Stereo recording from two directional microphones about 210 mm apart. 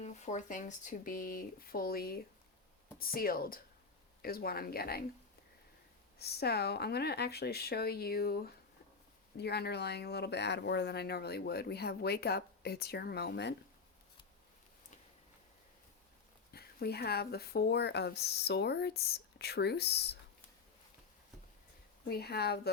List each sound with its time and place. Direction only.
0.0 s speech: 35° left (ahead or behind)
6.1 s speech: 50° left (ahead or behind)
16.5 s speech: 50° left (ahead or behind)
22.1 s speech: 50° left (ahead or behind)